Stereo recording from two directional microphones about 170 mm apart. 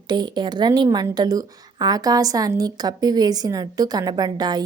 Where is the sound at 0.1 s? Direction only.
25° right (ahead or behind).